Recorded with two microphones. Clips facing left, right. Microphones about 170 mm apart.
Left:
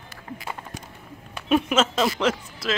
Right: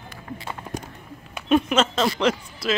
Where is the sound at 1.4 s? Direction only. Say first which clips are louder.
Right 1 dB; 5° left (ahead or behind).